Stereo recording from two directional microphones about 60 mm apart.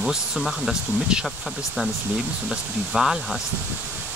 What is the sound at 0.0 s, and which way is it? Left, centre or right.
Speech, centre.